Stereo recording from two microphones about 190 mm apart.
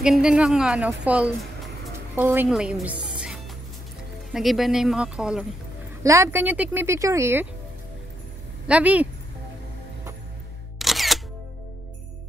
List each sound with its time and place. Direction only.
0.0 s a woman's voice: 5° right (ahead or behind)
8.6 s speech: 5° right (ahead or behind)
10.8 s single-lens reflex camera: centre (ahead or behind)